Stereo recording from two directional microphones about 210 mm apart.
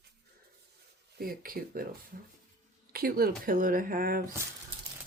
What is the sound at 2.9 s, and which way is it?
Speech, 45° right (ahead or behind).